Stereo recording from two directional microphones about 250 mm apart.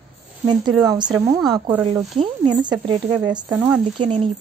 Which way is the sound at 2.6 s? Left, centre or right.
Centre.